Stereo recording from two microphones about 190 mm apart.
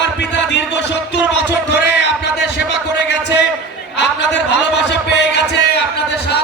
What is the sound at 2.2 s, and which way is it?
A man's voice, 65° left (ahead or behind).